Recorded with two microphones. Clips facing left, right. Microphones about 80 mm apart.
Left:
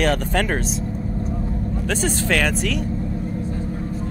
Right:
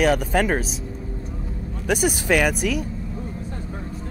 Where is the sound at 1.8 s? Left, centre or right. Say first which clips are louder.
Right 3 dB; centre.